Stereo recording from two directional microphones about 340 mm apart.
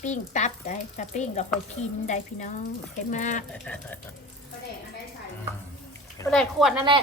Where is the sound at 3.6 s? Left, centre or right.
Centre.